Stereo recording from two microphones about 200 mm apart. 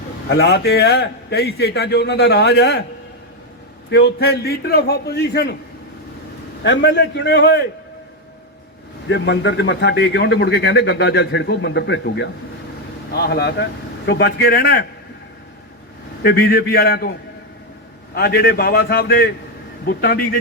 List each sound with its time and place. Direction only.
0.3 s a man's voice: 60° left (ahead or behind)
3.8 s a man's voice: 55° left (ahead or behind)
6.6 s a man's voice: 55° left (ahead or behind)
9.0 s a man's voice: 60° left (ahead or behind)
16.2 s a man's voice: 50° left (ahead or behind)
18.1 s a man's voice: 50° left (ahead or behind)